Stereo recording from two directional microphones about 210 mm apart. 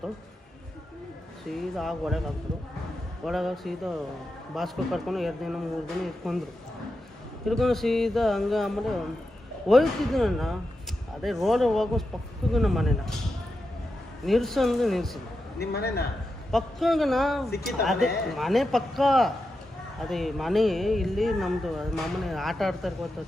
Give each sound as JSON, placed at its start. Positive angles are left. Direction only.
{"t": 1.5, "sound": "speech", "side_deg": 0}
{"t": 7.4, "sound": "speech", "side_deg": 0}
{"t": 14.3, "sound": "speech", "side_deg": 0}
{"t": 15.5, "sound": "a man's voice", "side_deg": 50}
{"t": 16.5, "sound": "speech", "side_deg": 0}